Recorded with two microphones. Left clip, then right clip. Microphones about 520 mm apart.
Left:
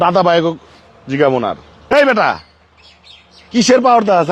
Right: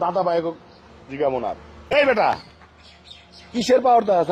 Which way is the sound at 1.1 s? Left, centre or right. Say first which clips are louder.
Left 9 dB; left.